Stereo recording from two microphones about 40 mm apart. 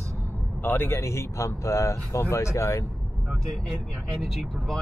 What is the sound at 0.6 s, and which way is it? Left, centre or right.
Speech, left.